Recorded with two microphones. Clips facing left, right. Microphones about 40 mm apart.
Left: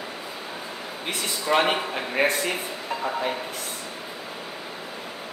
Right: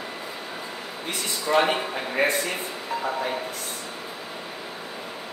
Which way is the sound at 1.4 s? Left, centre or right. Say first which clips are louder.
Even; left.